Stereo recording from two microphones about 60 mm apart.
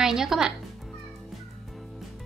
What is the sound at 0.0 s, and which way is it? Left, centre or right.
Speech, centre.